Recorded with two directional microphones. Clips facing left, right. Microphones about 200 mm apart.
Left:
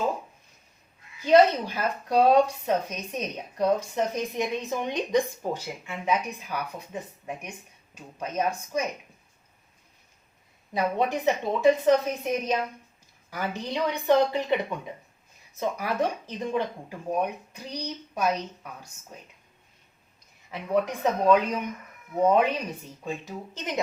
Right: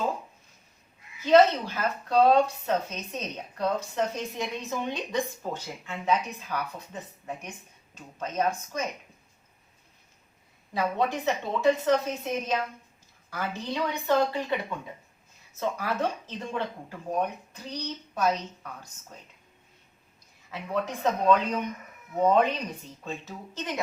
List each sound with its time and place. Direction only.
1.2 s a woman's voice: 15° left (ahead or behind)
10.8 s a woman's voice: 15° left (ahead or behind)
20.5 s a woman's voice: 15° left (ahead or behind)